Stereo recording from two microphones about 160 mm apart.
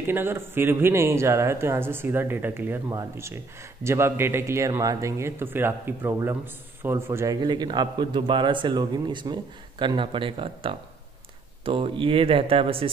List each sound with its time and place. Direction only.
0.0 s speech: 15° right (ahead or behind)
7.4 s a man's voice: 25° right (ahead or behind)